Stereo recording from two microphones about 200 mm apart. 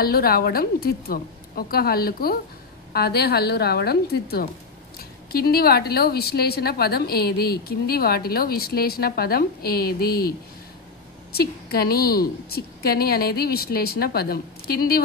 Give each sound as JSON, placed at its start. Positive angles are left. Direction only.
{"t": 0.0, "sound": "a woman's voice", "side_deg": 50}
{"t": 11.3, "sound": "a woman's voice", "side_deg": 50}